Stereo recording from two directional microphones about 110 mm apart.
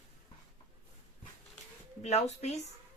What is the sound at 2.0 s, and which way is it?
Speech, 85° left.